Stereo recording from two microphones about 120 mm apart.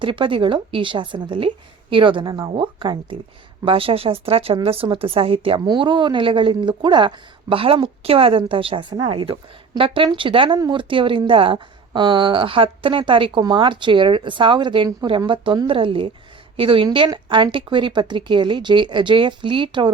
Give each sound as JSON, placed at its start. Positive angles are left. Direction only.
{"t": 0.0, "sound": "speech", "side_deg": -45}